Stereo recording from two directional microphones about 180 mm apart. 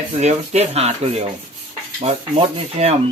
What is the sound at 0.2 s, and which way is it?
Rub, 35° right (ahead or behind).